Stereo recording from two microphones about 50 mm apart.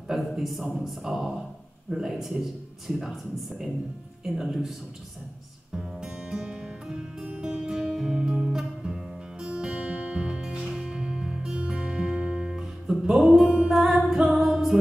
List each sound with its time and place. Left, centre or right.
0.4 s a man's voice: centre
5.8 s music: centre
9.5 s music: centre